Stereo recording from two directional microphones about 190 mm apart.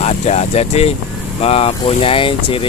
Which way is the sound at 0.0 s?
35° left (ahead or behind).